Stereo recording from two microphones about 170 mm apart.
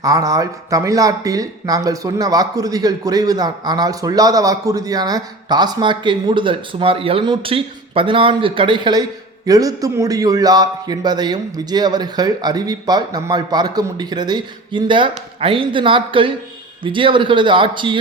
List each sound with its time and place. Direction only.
0.0 s speech: 20° right (ahead or behind)